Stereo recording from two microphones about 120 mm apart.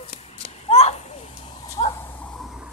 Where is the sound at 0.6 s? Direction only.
60° left (ahead or behind).